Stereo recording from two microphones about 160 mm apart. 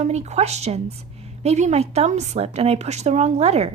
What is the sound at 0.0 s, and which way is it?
A woman's voice, 45° right (ahead or behind).